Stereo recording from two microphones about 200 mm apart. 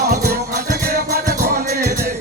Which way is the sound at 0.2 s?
50° right (ahead or behind).